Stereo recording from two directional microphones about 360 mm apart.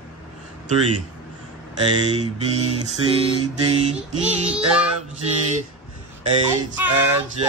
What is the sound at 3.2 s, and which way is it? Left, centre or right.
Mantra, centre.